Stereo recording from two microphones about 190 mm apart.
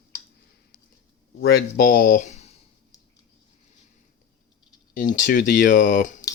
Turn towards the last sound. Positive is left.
turn(degrees=45)  # may be behind; listen again after turning